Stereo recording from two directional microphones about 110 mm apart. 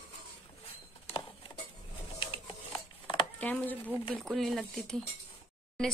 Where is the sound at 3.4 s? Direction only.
15° left (ahead or behind).